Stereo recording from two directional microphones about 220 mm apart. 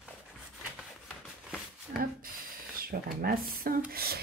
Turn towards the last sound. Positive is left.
turn(degrees=-45)  # may be behind; listen again after turning